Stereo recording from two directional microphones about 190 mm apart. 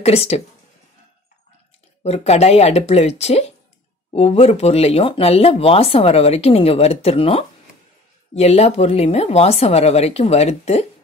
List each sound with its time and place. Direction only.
0.0 s speech: 35° left (ahead or behind)
2.0 s speech: 35° left (ahead or behind)